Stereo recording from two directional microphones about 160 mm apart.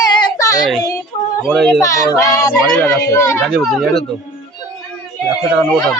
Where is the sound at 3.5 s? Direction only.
Centre (ahead or behind).